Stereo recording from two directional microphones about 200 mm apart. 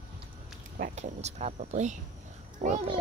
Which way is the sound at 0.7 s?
40° right (ahead or behind).